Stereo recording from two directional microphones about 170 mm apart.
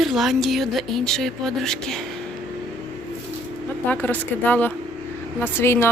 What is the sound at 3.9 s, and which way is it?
Speech, 10° left (ahead or behind).